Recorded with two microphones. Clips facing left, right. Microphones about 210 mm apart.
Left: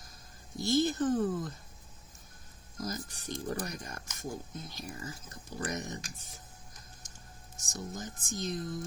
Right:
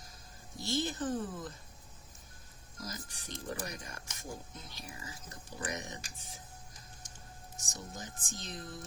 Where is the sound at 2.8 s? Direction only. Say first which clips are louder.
Left 7 dB; 45° left (ahead or behind).